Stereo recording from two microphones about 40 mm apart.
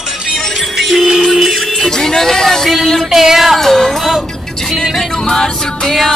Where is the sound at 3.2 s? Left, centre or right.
Centre.